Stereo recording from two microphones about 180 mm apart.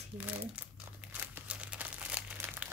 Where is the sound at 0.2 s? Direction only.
10° right (ahead or behind).